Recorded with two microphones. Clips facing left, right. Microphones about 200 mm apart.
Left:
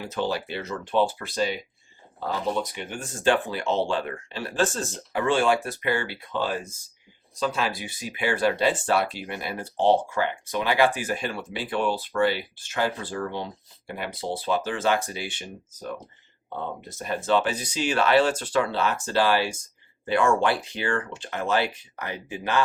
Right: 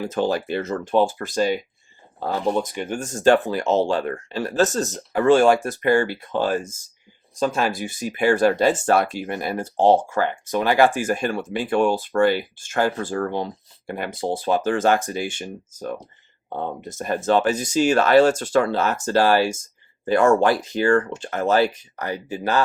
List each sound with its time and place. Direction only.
0.0 s speech: 50° right (ahead or behind)